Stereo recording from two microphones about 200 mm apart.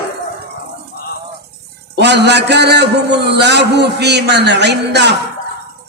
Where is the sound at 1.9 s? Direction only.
60° right (ahead or behind).